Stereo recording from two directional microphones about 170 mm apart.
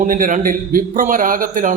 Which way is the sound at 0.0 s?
50° right (ahead or behind).